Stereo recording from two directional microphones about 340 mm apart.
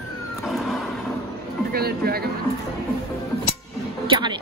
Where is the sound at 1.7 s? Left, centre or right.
Right.